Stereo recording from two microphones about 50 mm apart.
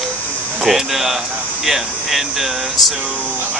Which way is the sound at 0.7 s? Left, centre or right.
Centre.